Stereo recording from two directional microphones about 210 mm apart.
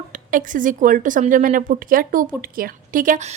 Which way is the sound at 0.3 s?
40° right (ahead or behind).